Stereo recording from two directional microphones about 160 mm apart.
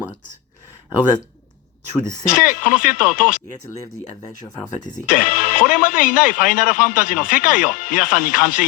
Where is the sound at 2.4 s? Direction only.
55° left (ahead or behind).